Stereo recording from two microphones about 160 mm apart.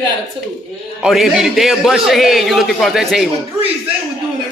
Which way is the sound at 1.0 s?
Centre (ahead or behind).